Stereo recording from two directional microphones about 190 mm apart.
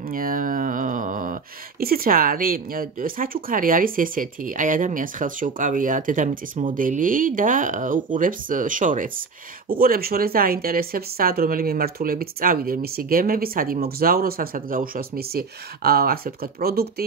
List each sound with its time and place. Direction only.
0.1 s speech: 45° right (ahead or behind)